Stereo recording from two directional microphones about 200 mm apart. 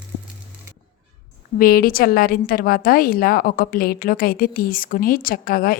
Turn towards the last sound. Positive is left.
turn(degrees=45)  # may be behind; listen again after turning